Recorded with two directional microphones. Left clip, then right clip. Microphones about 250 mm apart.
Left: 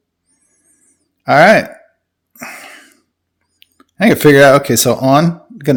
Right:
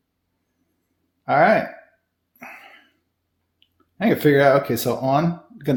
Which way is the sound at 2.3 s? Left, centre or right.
Left.